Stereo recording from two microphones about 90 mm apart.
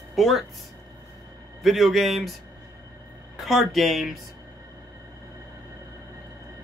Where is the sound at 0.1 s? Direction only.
Centre (ahead or behind).